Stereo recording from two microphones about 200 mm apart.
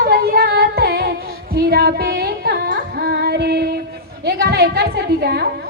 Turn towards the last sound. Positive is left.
turn(degrees=-55)  # may be behind; listen again after turning